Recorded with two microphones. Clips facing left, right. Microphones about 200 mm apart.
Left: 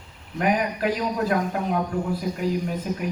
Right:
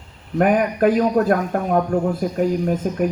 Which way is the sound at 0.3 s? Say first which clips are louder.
Right 7 dB; 50° right (ahead or behind).